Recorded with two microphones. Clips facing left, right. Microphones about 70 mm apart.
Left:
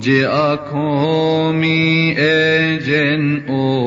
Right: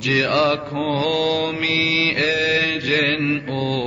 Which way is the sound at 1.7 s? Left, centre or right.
Left.